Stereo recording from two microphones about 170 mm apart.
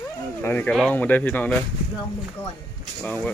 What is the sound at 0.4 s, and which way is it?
Speech, 10° left (ahead or behind).